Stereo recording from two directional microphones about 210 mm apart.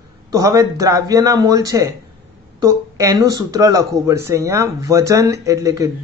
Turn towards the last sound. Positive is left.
turn(degrees=-15)  # may be behind; listen again after turning